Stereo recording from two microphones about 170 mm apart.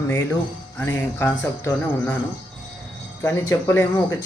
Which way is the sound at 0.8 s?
15° left (ahead or behind).